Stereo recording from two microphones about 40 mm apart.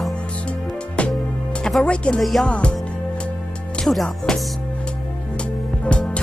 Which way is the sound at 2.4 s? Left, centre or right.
Left.